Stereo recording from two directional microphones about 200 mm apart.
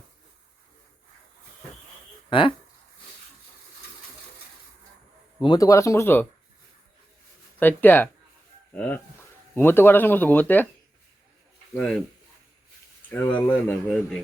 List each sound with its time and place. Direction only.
2.3 s speech: 25° left (ahead or behind)
5.4 s speech: 20° left (ahead or behind)
7.6 s speech: 10° left (ahead or behind)
11.7 s speech: 5° left (ahead or behind)
13.1 s speech: 10° left (ahead or behind)